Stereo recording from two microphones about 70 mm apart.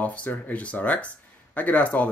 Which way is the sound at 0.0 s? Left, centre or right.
Left.